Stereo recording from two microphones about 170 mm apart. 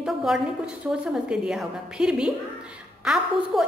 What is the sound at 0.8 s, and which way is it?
A woman's voice, 5° right (ahead or behind).